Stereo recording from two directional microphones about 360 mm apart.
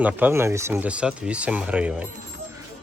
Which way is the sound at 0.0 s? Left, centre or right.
Centre.